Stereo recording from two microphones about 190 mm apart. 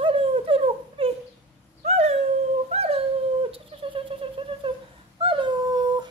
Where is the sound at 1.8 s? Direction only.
35° right (ahead or behind).